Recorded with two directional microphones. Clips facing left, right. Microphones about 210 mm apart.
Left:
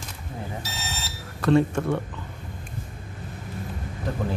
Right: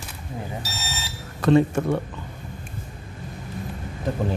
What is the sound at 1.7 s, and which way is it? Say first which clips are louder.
Speech: right 2 dB; 15° right (ahead or behind).